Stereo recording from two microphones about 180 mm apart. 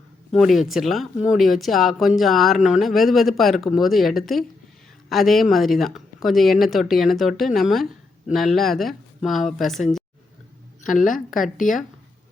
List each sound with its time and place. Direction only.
0.3 s speech: centre (ahead or behind)
10.8 s a woman's voice: 45° left (ahead or behind)